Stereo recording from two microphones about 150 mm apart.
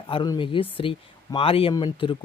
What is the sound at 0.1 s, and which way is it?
A man's voice, 35° left (ahead or behind).